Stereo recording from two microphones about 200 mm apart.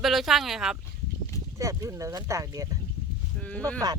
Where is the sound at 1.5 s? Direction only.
15° right (ahead or behind).